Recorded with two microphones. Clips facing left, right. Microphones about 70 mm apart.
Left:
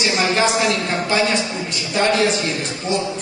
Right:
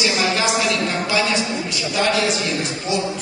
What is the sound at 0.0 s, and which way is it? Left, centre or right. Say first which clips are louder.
A woman's voice: left 2 dB; left.